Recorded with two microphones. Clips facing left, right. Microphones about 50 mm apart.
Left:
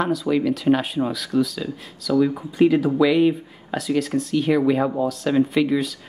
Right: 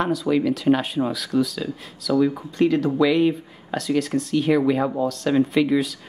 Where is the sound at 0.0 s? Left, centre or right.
Centre.